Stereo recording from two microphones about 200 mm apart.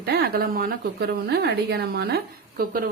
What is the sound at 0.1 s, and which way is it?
A woman's voice, 50° right (ahead or behind).